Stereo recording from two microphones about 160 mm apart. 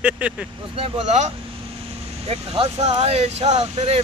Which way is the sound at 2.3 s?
35° right (ahead or behind).